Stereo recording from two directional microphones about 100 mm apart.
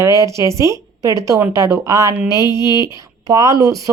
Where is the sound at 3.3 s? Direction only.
40° right (ahead or behind).